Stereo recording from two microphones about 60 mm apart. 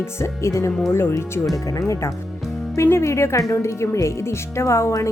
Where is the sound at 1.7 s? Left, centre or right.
Left.